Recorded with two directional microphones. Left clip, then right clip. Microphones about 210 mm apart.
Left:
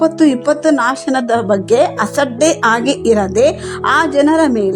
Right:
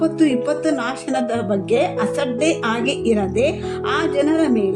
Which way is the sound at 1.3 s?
30° left (ahead or behind).